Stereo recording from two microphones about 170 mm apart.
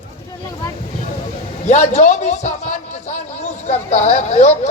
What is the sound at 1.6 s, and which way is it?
A man's voice, 45° left (ahead or behind).